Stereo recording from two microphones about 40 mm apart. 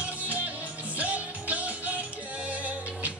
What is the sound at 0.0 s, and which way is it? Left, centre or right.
Music, right.